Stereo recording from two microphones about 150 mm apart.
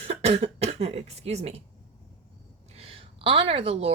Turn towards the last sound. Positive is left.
turn(degrees=-40)  # may be behind; listen again after turning